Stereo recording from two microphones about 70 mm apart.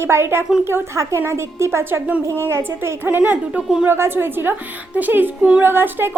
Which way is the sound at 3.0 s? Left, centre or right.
Right.